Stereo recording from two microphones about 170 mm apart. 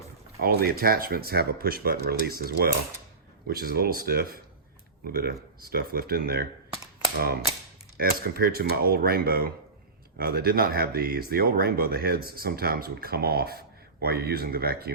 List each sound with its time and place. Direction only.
0.3 s speech: 60° right (ahead or behind)
7.9 s speech: 60° right (ahead or behind)